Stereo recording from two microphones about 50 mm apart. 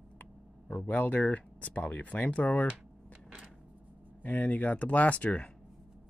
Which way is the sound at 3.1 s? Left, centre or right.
Right.